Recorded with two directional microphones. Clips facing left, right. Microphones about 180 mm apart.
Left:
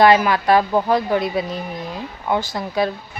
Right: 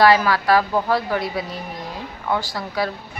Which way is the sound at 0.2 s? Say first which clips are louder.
Left 2 dB; 20° left (ahead or behind).